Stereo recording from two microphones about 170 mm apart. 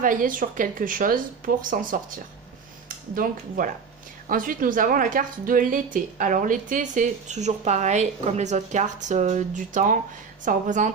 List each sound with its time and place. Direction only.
0.0 s a woman's voice: 55° right (ahead or behind)
3.2 s a woman's voice: 55° right (ahead or behind)